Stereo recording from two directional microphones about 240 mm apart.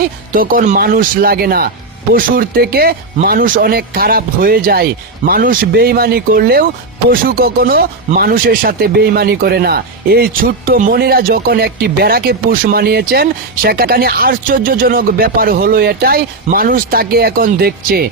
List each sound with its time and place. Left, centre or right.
0.3 s speech: right